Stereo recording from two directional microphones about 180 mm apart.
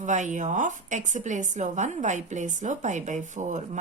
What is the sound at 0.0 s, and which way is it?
A woman's voice, 45° right (ahead or behind).